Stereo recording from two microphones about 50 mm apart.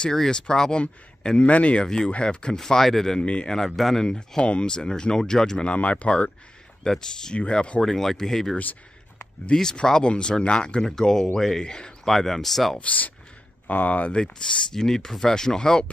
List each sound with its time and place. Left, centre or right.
0.0 s speech: centre
2.5 s speech: centre
3.2 s speech: centre
3.5 s speech: centre
5.7 s speech: left
7.8 s speech: centre
10.8 s a man's voice: centre
12.1 s speech: centre
12.7 s speech: left
14.1 s speech: centre